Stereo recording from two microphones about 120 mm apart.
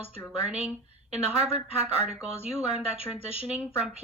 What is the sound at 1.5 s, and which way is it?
Speech, 60° right (ahead or behind).